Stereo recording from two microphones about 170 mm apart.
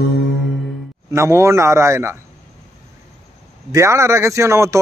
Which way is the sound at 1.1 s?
15° right (ahead or behind).